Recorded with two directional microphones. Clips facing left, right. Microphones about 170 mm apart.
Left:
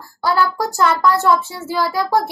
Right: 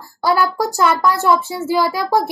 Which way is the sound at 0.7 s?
10° right (ahead or behind).